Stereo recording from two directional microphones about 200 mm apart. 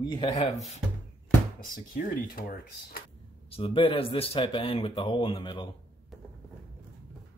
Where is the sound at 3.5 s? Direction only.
30° left (ahead or behind).